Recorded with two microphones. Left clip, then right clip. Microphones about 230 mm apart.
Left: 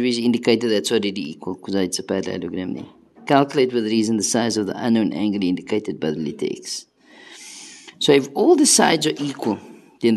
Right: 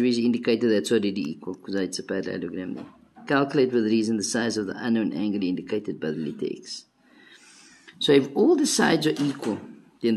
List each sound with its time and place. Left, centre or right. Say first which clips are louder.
0.0 s speech: left 4 dB; left
8.0 s speech: left 3 dB; left